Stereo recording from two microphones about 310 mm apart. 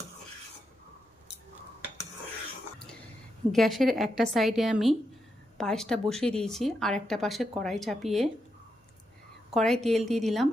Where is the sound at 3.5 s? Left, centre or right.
Centre.